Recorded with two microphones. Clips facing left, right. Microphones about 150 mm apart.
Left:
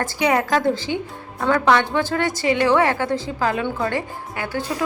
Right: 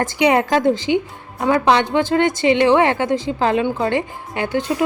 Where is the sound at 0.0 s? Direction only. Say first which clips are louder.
Right 4 dB; 20° right (ahead or behind).